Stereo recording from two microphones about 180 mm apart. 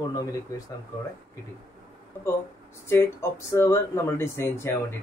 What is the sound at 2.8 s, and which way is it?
Speech, 15° left (ahead or behind).